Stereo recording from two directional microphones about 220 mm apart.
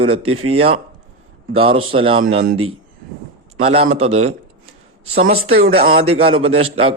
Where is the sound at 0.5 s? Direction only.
25° right (ahead or behind).